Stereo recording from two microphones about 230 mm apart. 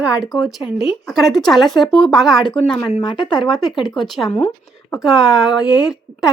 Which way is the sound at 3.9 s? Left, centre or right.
Centre.